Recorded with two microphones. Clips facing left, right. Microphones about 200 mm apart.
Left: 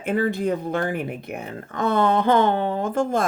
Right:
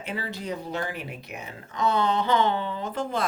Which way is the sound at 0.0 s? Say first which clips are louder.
Left 11 dB; 50° left (ahead or behind).